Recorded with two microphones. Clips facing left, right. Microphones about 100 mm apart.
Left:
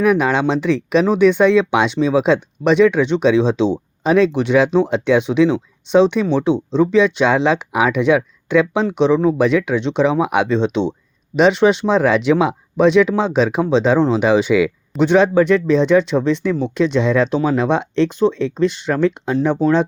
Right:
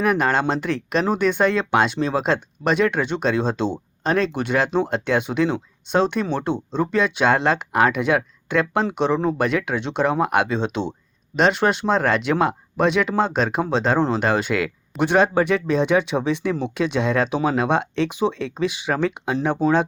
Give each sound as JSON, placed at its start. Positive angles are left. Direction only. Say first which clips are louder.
{"t": 0.0, "sound": "speech", "louder": "left 4 dB", "side_deg": 0}